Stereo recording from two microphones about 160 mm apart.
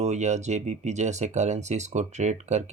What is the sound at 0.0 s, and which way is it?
Speech, 45° right (ahead or behind).